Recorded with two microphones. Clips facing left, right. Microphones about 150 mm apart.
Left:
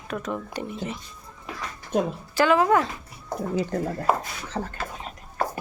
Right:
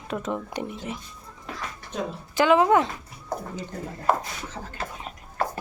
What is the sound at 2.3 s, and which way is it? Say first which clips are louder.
Speech: right 1 dB; 20° right (ahead or behind).